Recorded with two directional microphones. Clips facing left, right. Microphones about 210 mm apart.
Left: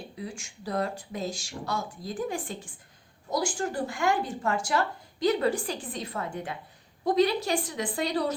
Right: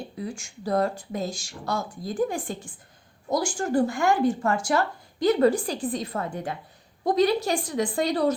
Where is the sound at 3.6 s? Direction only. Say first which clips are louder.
Right 6 dB; 50° right (ahead or behind).